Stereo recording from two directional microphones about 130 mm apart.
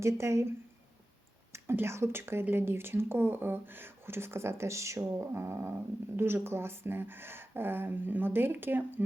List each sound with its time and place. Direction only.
0.0 s speech: 20° right (ahead or behind)
1.5 s speech: 20° right (ahead or behind)